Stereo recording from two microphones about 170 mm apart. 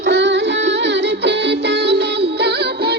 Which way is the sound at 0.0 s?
90° right.